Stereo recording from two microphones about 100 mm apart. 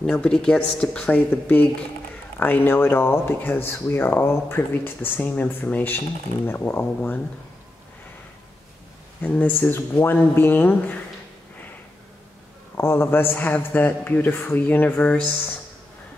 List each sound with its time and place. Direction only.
0.0 s speech: 10° left (ahead or behind)
9.2 s speech: 15° left (ahead or behind)
12.7 s speech: 25° left (ahead or behind)